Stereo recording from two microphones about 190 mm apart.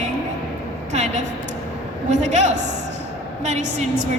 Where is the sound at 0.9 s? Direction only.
35° right (ahead or behind).